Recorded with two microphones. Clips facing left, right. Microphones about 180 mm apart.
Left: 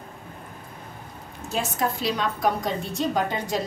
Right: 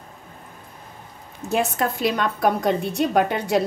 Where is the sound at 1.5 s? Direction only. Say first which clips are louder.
Right 4 dB; 60° right (ahead or behind).